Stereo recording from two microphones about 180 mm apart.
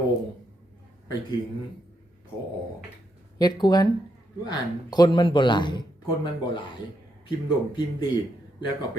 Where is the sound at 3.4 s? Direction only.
25° left (ahead or behind).